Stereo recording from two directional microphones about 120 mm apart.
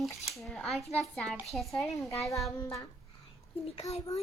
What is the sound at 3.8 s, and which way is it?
Speech, 60° left (ahead or behind).